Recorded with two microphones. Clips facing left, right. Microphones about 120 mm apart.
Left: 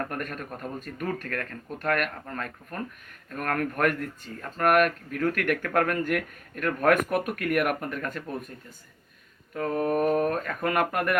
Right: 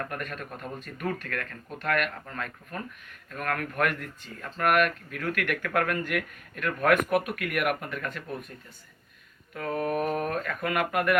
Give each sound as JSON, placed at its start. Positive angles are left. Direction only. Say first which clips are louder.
{"t": 0.1, "sound": "speech", "louder": "left 2 dB", "side_deg": 40}
{"t": 9.6, "sound": "speech", "louder": "left 3 dB", "side_deg": 35}